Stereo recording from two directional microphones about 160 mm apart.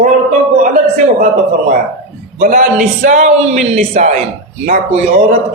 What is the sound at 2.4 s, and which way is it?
A man's voice, 50° right (ahead or behind).